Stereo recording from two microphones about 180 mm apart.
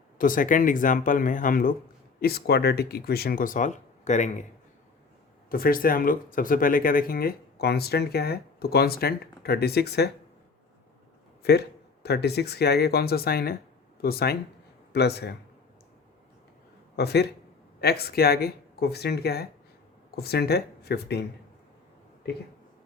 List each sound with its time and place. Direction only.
0.2 s speech: 50° left (ahead or behind)
2.2 s speech: 60° left (ahead or behind); by 4.4 s 40° left (ahead or behind)
5.5 s speech: 55° left (ahead or behind)
12.0 s speech: 65° left (ahead or behind)
17.0 s speech: 65° left (ahead or behind)